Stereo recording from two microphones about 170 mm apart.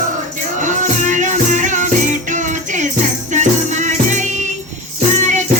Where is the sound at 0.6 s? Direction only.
45° right (ahead or behind).